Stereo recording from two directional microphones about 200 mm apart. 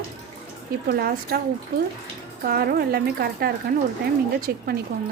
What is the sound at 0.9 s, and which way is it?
Speech, 50° right (ahead or behind).